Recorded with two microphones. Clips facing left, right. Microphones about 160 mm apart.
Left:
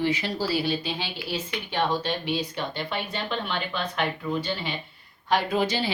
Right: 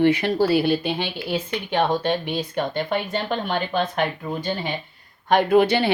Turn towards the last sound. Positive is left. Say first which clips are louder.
# right 8 dB
turn(degrees=-60)  # may be behind; listen again after turning